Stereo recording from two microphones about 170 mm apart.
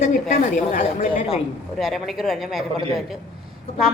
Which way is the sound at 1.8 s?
Centre (ahead or behind).